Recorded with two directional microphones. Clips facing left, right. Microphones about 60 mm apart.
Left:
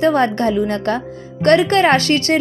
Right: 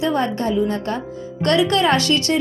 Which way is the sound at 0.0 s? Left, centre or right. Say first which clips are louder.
Left 5 dB; left.